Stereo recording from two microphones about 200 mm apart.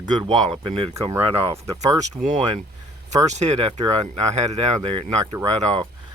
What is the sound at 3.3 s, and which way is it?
Speech, 35° right (ahead or behind).